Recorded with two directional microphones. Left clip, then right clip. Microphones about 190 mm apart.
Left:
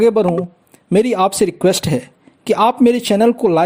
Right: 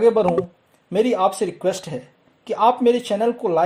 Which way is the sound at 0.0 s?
35° left (ahead or behind).